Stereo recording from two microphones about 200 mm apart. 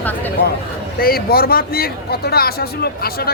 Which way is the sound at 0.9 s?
50° left (ahead or behind).